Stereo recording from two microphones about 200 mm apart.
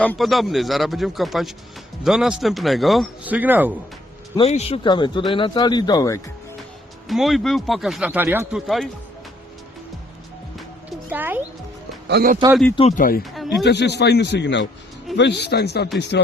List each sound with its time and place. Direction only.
0.0 s speech: 5° left (ahead or behind)
4.4 s a man's voice: 30° left (ahead or behind)
7.1 s speech: centre (ahead or behind)
11.1 s speech: 10° right (ahead or behind)
12.0 s speech: 50° right (ahead or behind)
13.0 s speech: 45° left (ahead or behind)
13.3 s speech: centre (ahead or behind)
13.7 s a man's voice: 55° left (ahead or behind)